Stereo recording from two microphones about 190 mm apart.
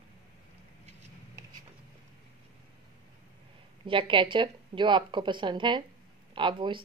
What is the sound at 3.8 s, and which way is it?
A woman's voice, 25° right (ahead or behind).